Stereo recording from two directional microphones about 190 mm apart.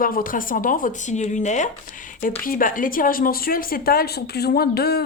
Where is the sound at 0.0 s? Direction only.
45° left (ahead or behind).